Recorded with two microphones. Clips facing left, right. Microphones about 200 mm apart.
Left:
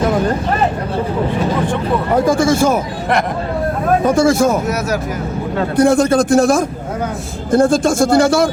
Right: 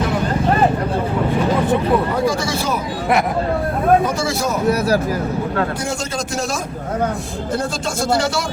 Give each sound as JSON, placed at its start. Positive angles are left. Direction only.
{"t": 2.2, "sound": "a sound", "side_deg": 50}
{"t": 4.0, "sound": "speech", "side_deg": 50}
{"t": 5.7, "sound": "a man's voice", "side_deg": 55}